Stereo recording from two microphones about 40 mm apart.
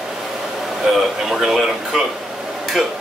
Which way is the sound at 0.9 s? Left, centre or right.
Centre.